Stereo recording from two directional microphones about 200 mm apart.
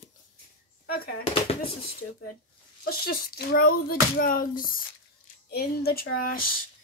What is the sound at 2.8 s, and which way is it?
Speech, 50° left (ahead or behind).